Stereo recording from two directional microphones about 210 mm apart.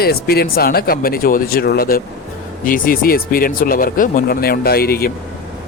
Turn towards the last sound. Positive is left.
turn(degrees=45)  # may be behind; listen again after turning